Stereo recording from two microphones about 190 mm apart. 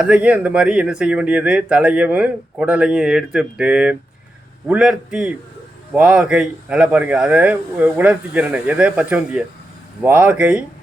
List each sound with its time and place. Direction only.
0.0 s speech: 5° right (ahead or behind)